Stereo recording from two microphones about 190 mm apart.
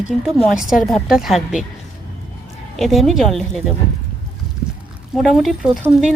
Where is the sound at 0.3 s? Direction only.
Centre (ahead or behind).